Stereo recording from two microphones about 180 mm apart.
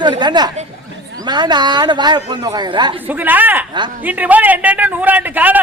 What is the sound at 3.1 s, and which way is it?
A man's voice, 10° right (ahead or behind).